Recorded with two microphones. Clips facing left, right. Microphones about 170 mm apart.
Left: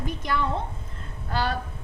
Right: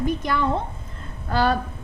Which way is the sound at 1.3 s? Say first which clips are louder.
Right 7 dB; 45° right (ahead or behind).